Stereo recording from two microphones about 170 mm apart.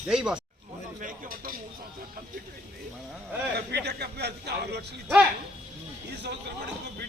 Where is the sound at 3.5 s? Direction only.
75° right (ahead or behind).